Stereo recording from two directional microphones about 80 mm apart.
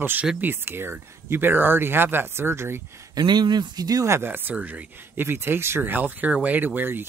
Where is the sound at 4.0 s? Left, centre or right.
Right.